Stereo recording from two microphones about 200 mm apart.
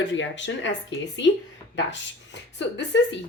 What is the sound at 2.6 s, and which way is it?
Speech, 60° left (ahead or behind).